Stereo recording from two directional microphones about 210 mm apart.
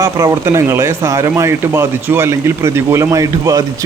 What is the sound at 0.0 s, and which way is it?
Speech, 15° right (ahead or behind).